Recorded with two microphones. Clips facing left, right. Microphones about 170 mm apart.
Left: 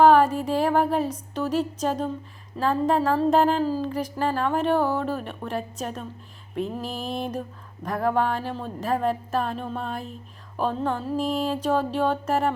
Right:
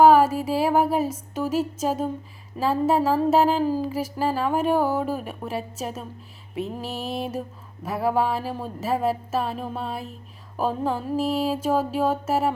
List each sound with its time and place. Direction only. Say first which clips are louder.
0.0 s speech: right 1 dB; 5° right (ahead or behind)